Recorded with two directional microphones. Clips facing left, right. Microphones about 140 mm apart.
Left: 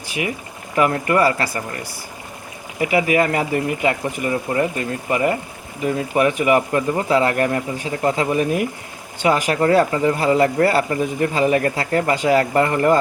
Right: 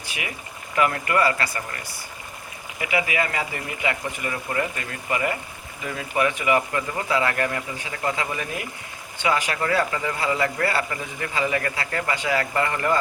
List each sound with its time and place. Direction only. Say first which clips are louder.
0.8 s speech: left 5 dB; 35° left (ahead or behind)
4.0 s speech: left 7 dB; 30° left (ahead or behind)